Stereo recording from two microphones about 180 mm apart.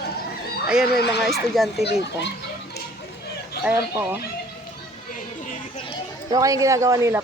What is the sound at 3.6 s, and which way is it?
Speech, 10° right (ahead or behind).